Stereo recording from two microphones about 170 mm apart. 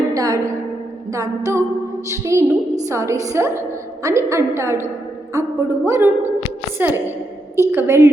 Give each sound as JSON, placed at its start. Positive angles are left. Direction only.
{"t": 0.1, "sound": "a woman's voice", "side_deg": -20}
{"t": 1.1, "sound": "music", "side_deg": -20}
{"t": 2.0, "sound": "a woman's voice", "side_deg": -15}